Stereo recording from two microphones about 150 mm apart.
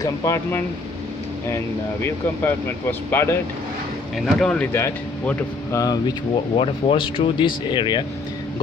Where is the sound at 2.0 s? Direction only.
15° left (ahead or behind).